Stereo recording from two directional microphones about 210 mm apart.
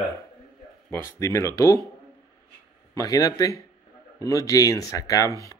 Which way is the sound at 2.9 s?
15° left (ahead or behind).